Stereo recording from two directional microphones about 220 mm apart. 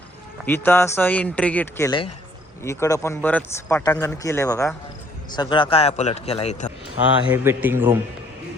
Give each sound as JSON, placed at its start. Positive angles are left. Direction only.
{"t": 0.4, "sound": "a man's voice", "side_deg": 10}
{"t": 7.3, "sound": "a man's voice", "side_deg": -10}